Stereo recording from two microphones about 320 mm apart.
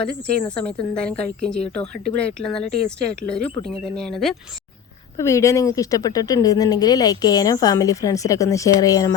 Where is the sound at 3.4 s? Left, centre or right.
Centre.